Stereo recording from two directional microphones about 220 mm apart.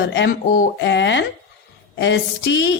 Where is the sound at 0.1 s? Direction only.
50° left (ahead or behind).